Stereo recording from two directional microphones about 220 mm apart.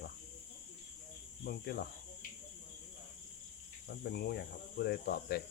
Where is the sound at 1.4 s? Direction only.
45° left (ahead or behind).